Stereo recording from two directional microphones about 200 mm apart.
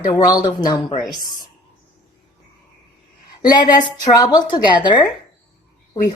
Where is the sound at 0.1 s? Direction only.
20° left (ahead or behind).